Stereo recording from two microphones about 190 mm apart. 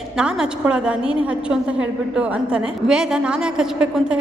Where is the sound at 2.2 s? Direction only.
5° right (ahead or behind).